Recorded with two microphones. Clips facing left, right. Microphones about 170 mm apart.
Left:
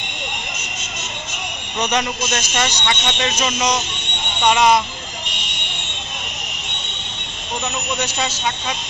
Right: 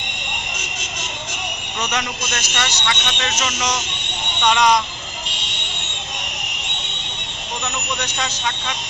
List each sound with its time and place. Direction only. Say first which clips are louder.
2.6 s speech: left 2 dB; 20° left (ahead or behind)
4.4 s speech: left 2 dB; 5° left (ahead or behind)
8.0 s speech: left 3 dB; 10° left (ahead or behind)